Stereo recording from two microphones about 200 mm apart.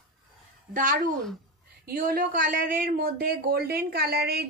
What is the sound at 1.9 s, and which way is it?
Speech, 45° right (ahead or behind).